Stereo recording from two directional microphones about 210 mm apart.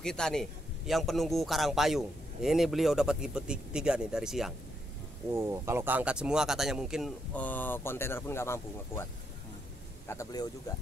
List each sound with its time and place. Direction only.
0.0 s a man's voice: 5° left (ahead or behind)
5.3 s a man's voice: 15° right (ahead or behind); by 9.0 s 10° left (ahead or behind)
10.0 s speech: 15° left (ahead or behind)